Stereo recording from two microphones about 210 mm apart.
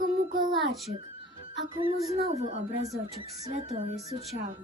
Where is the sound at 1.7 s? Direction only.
25° right (ahead or behind).